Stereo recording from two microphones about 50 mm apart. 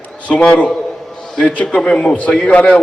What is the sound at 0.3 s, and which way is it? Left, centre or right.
A man's voice, left.